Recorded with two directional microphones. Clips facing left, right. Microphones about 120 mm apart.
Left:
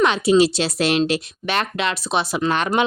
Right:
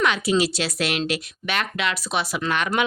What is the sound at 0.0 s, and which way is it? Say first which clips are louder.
Speech: left 6 dB; 25° left (ahead or behind).